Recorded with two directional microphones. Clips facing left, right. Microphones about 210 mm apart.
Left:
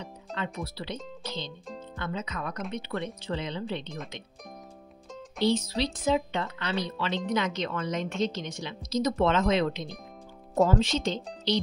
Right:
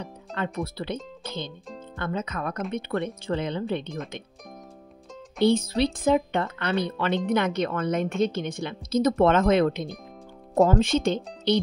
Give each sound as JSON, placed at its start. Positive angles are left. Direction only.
{"t": 0.4, "sound": "speech", "side_deg": -50}
{"t": 1.2, "sound": "music", "side_deg": -50}
{"t": 2.0, "sound": "speech", "side_deg": -50}
{"t": 5.4, "sound": "speech", "side_deg": -55}